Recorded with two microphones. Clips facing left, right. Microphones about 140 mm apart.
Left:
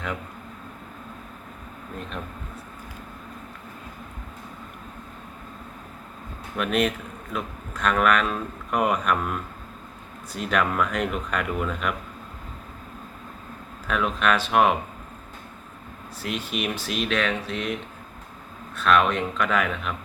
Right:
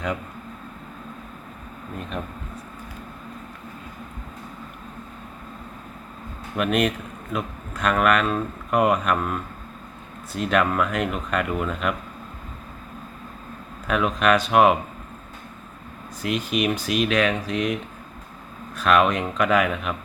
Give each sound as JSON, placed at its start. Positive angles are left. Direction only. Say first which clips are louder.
{"t": 6.6, "sound": "speech", "louder": "right 2 dB", "side_deg": -5}
{"t": 13.8, "sound": "speech", "louder": "right 3 dB", "side_deg": -5}
{"t": 16.5, "sound": "speech", "louder": "right 7 dB", "side_deg": -5}
{"t": 18.8, "sound": "speech", "louder": "right 2 dB", "side_deg": -5}